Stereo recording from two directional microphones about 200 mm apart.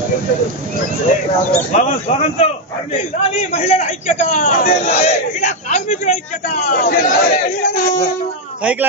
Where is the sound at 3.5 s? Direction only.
35° left (ahead or behind).